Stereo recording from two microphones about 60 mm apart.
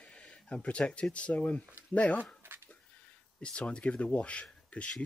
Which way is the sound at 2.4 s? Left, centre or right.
Right.